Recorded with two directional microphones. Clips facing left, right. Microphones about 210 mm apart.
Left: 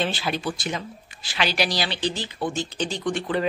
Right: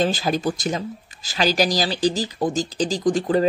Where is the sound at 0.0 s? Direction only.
40° right (ahead or behind).